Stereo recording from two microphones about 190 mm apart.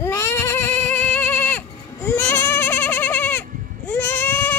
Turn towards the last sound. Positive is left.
turn(degrees=10)  # may be behind; listen again after turning